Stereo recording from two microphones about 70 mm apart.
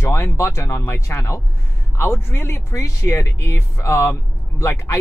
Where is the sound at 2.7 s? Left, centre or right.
Left.